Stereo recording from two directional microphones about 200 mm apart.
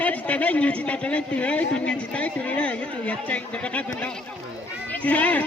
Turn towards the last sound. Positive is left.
turn(degrees=5)  # may be behind; listen again after turning